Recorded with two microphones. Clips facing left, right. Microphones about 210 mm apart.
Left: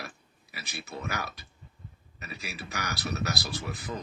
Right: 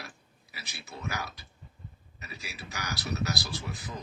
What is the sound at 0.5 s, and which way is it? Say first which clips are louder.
A man's voice: left 5 dB; 60° left (ahead or behind).